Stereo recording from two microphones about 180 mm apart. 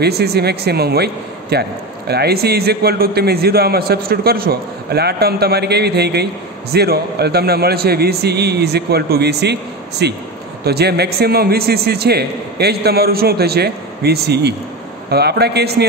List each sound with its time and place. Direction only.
0.0 s a man's voice: 65° right (ahead or behind)